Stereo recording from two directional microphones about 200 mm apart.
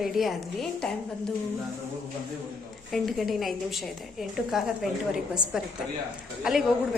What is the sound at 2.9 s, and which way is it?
Speech, centre (ahead or behind).